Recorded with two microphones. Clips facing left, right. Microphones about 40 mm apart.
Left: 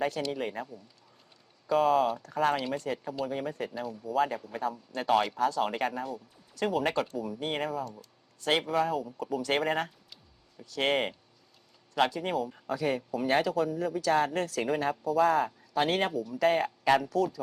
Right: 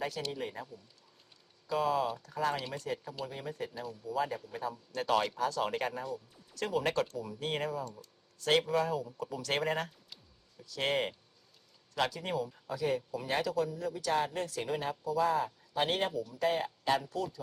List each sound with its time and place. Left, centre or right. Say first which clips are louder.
0.3 s speech: left 5 dB; left
4.9 s speech: left 4 dB; left
11.9 s speech: left 6 dB; left
12.3 s a man's voice: left 4 dB; left